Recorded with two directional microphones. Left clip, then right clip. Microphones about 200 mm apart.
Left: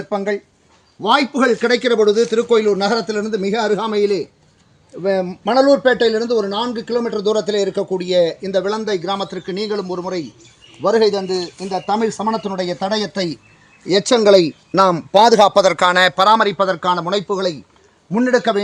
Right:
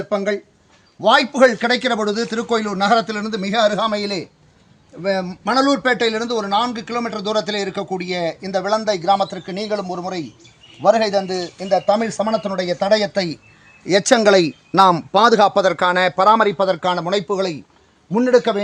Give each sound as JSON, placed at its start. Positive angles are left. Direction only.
{"t": 1.0, "sound": "a man's voice", "side_deg": -30}
{"t": 5.5, "sound": "speech", "side_deg": -20}
{"t": 15.1, "sound": "a man's voice", "side_deg": 10}